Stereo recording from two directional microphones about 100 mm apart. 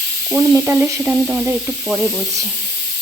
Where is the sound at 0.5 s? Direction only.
25° right (ahead or behind).